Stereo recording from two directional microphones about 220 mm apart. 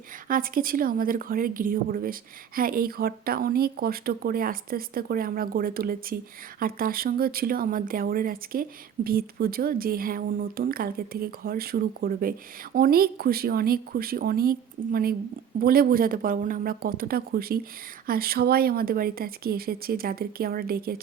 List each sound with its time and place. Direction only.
0.3 s speech: 40° right (ahead or behind)
15.6 s speech: 45° right (ahead or behind)